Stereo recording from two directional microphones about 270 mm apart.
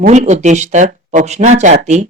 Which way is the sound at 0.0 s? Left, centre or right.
Right.